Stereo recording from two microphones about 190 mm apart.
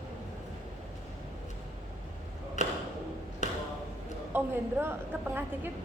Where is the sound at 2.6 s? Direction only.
40° left (ahead or behind).